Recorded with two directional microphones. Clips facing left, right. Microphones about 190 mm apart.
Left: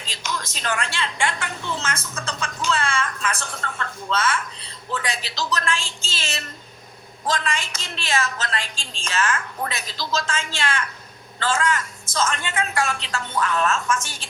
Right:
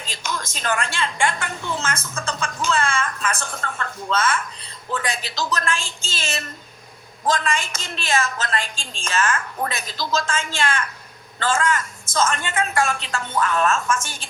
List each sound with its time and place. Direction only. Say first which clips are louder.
0.0 s a woman's voice: right 1 dB; 50° right (ahead or behind)